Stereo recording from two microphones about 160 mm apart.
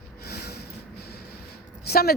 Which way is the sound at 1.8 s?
75° left (ahead or behind).